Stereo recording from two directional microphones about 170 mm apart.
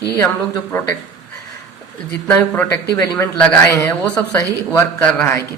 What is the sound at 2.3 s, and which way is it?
Speech, 10° left (ahead or behind).